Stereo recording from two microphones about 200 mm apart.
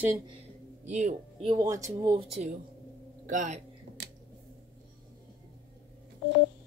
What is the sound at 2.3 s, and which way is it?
Speech, 30° right (ahead or behind).